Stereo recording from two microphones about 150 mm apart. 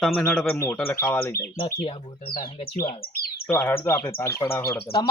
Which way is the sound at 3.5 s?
20° left (ahead or behind).